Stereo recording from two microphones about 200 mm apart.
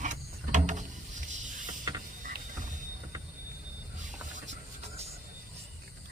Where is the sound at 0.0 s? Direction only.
35° right (ahead or behind).